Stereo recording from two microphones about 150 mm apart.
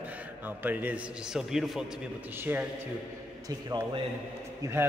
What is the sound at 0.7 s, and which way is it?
A man's voice, 10° right (ahead or behind).